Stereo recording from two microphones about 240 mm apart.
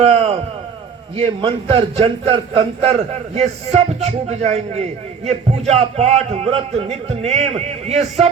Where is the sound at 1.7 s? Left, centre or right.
Right.